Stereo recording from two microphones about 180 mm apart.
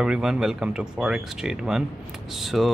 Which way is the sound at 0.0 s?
5° right (ahead or behind).